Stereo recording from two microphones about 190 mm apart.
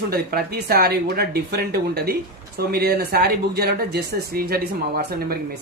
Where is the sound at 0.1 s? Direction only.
55° right (ahead or behind).